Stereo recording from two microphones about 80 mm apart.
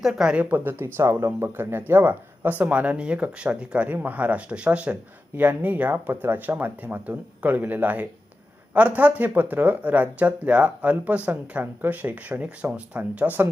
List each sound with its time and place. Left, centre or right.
0.0 s speech: centre; by 0.9 s right
0.9 s speech: right